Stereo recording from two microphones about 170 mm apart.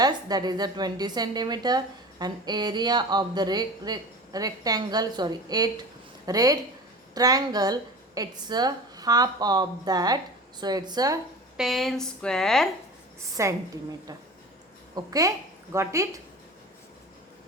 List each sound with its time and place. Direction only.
0.0 s a woman's voice: 25° right (ahead or behind)
11.5 s speech: centre (ahead or behind)
13.3 s a woman's voice: 20° right (ahead or behind)
14.9 s a woman's voice: 20° right (ahead or behind)